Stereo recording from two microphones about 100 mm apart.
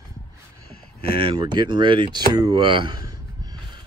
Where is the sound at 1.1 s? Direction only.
65° right (ahead or behind).